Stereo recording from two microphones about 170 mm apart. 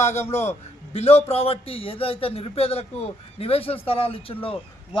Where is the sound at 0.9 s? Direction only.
40° left (ahead or behind).